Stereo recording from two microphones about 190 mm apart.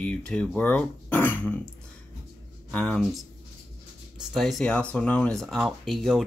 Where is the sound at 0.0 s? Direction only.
5° left (ahead or behind).